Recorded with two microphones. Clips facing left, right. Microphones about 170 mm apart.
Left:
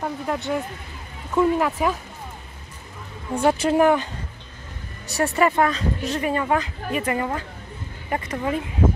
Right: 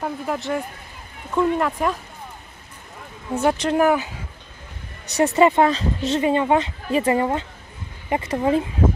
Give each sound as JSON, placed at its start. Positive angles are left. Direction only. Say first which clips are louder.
{"t": 0.0, "sound": "speech", "louder": "even", "side_deg": 0}
{"t": 3.5, "sound": "speech", "louder": "left 1 dB", "side_deg": 5}
{"t": 5.0, "sound": "speech", "louder": "right 4 dB", "side_deg": -20}